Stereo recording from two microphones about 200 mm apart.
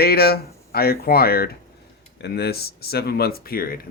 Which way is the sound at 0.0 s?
50° left (ahead or behind).